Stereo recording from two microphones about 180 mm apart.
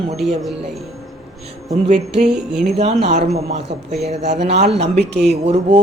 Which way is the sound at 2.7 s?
35° right (ahead or behind).